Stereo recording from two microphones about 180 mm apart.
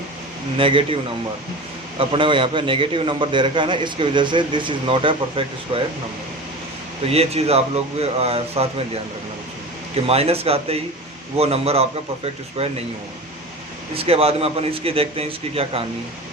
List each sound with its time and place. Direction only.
0.5 s a man's voice: 30° right (ahead or behind)
2.0 s a man's voice: 30° right (ahead or behind)
7.1 s a man's voice: 35° right (ahead or behind)
9.9 s a man's voice: 35° right (ahead or behind)
13.9 s a man's voice: 35° right (ahead or behind)